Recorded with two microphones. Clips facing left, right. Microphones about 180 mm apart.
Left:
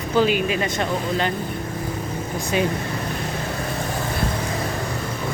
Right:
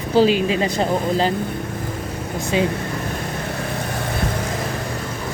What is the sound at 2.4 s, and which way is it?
Speech, 25° right (ahead or behind).